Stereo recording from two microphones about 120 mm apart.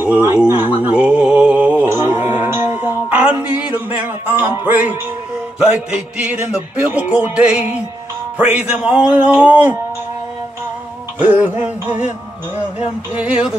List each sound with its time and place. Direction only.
0.0 s speech: 15° right (ahead or behind)
0.5 s mantra: 15° right (ahead or behind)
5.7 s music: 10° right (ahead or behind)
11.1 s music: 15° right (ahead or behind)
13.1 s music: 10° right (ahead or behind)